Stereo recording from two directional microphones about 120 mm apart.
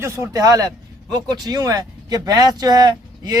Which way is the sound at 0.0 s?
25° right (ahead or behind).